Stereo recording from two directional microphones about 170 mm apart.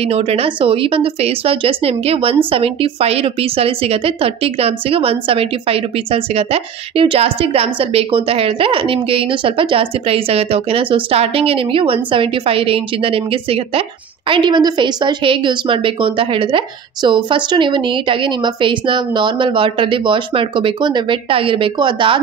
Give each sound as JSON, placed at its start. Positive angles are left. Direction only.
{"t": 0.0, "sound": "a woman's voice", "side_deg": -35}